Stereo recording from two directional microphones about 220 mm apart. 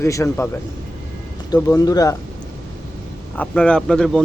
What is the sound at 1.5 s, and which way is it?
Speech, 15° left (ahead or behind).